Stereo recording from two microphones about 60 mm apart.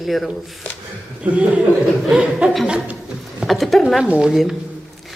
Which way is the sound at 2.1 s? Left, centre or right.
Centre.